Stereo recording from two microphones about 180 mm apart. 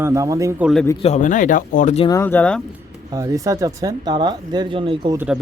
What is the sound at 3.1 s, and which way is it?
Speech, 20° right (ahead or behind).